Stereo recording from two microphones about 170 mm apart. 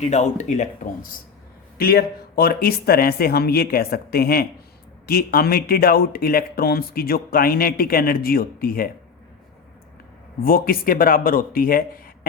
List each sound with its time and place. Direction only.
0.0 s speech: 45° left (ahead or behind)
1.8 s speech: 65° left (ahead or behind)
10.4 s speech: 60° left (ahead or behind)